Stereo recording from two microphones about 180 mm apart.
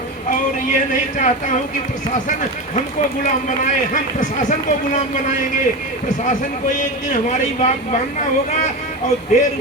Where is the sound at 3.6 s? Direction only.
45° left (ahead or behind).